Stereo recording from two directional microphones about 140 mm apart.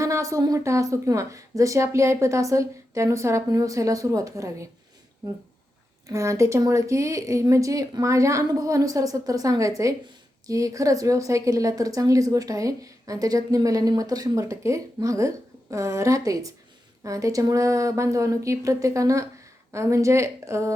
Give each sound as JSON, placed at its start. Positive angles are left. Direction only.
{"t": 0.0, "sound": "a woman's voice", "side_deg": -20}
{"t": 6.1, "sound": "a woman's voice", "side_deg": -20}